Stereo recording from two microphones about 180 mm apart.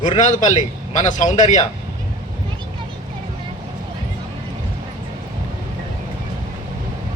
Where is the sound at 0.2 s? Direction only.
45° left (ahead or behind).